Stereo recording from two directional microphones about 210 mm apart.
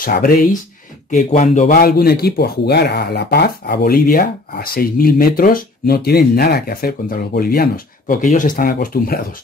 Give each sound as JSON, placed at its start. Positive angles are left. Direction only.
{"t": 0.0, "sound": "speech", "side_deg": 40}